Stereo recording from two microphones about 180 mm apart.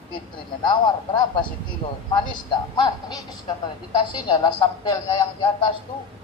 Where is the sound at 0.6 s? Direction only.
25° left (ahead or behind).